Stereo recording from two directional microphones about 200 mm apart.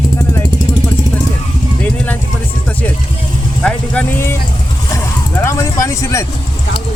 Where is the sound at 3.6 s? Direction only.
5° left (ahead or behind).